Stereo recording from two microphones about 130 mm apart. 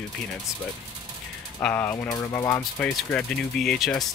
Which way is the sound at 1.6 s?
10° left (ahead or behind).